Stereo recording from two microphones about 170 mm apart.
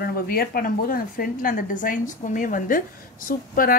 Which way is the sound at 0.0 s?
60° left (ahead or behind).